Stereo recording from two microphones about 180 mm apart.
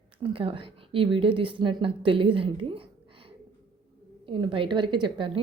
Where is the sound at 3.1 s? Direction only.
30° right (ahead or behind).